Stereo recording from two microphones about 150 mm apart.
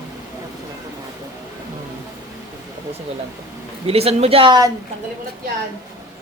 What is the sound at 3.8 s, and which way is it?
Speech, 40° right (ahead or behind).